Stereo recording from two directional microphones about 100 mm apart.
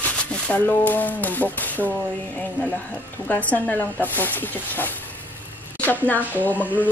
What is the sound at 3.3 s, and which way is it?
Speech, 15° left (ahead or behind).